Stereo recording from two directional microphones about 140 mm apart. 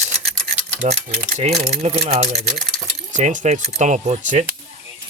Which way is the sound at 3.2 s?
60° right (ahead or behind).